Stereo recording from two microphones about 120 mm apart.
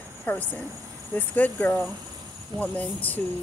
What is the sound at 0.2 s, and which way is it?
Speech, 15° left (ahead or behind).